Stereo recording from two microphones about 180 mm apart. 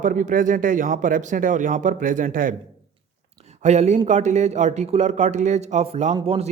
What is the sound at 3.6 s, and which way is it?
A man's voice, 40° right (ahead or behind).